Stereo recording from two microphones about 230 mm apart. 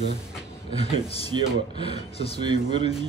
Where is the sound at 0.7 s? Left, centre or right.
Left.